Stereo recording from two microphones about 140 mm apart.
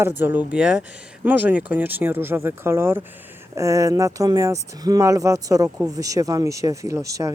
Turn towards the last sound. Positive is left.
turn(degrees=-25)  # may be behind; listen again after turning